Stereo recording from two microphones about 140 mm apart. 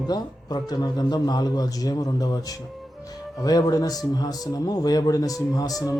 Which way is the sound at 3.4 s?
25° left (ahead or behind).